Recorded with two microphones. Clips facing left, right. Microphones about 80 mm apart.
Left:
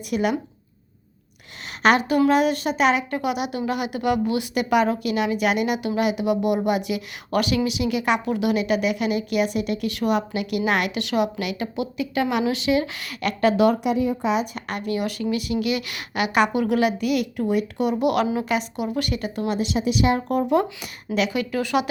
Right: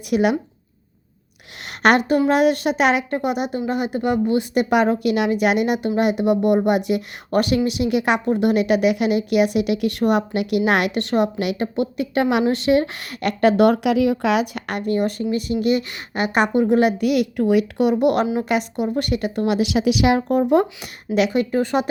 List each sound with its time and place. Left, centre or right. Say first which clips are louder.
0.1 s a woman's voice: right 5 dB; right
1.8 s a woman's voice: right 2 dB; right
4.5 s a woman's voice: right 2 dB; right
8.2 s a woman's voice: right 4 dB; right
13.8 s a woman's voice: right 4 dB; right
17.0 s a woman's voice: right 4 dB; right
17.9 s a woman's voice: right 1 dB; right
21.3 s a woman's voice: right 3 dB; right